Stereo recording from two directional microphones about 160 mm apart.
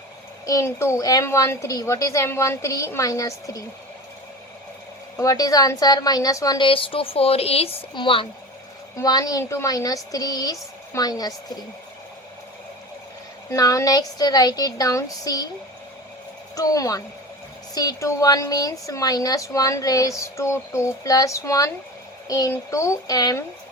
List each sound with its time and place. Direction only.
0.4 s a woman's voice: 20° left (ahead or behind)
5.1 s a woman's voice: 20° left (ahead or behind)
6.7 s speech: 35° left (ahead or behind)
9.0 s a woman's voice: 25° left (ahead or behind)
13.5 s a woman's voice: 20° left (ahead or behind)
16.6 s a woman's voice: 20° left (ahead or behind)